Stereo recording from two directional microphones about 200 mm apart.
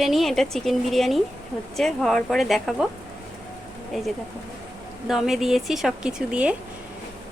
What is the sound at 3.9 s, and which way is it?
A woman's voice, centre (ahead or behind).